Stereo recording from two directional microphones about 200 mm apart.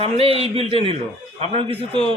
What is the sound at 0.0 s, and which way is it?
Speech, 30° right (ahead or behind).